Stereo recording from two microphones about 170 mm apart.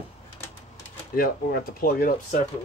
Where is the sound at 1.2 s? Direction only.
60° left (ahead or behind).